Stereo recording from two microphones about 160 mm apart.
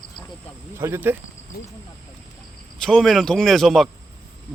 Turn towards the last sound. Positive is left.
turn(degrees=0)  # may be behind; listen again after turning